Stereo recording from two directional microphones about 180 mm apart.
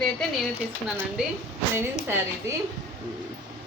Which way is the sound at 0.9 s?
5° right (ahead or behind).